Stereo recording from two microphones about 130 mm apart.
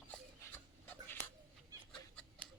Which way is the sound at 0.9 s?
15° left (ahead or behind).